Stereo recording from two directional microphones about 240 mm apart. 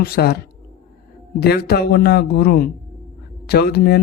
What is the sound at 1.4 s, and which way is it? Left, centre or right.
Speech, left.